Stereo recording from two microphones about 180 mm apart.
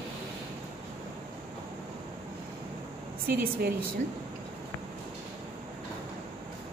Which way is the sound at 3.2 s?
55° right (ahead or behind).